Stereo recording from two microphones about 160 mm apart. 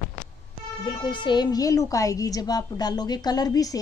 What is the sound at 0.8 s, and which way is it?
A woman's voice, 30° left (ahead or behind).